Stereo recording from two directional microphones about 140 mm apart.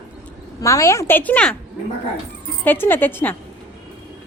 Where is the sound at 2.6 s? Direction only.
15° left (ahead or behind).